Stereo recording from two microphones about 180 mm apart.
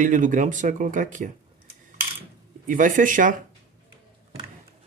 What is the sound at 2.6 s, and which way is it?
Speech, 50° right (ahead or behind).